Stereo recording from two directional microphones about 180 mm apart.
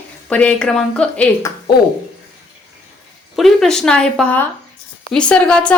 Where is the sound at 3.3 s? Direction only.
Centre (ahead or behind).